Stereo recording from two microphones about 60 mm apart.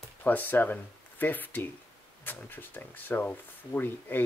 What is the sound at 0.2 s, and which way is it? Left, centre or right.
Speech, left.